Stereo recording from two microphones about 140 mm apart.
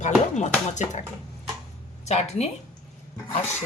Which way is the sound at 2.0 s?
55° left (ahead or behind).